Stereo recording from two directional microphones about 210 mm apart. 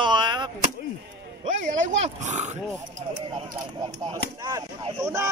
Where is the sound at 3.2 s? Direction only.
20° right (ahead or behind).